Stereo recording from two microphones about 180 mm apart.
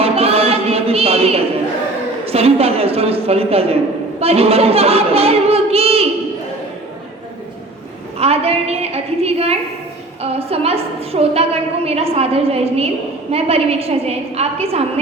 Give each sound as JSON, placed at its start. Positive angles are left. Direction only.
{"t": 0.0, "sound": "music", "side_deg": -35}
{"t": 2.2, "sound": "speech", "side_deg": -35}
{"t": 8.2, "sound": "speech", "side_deg": -35}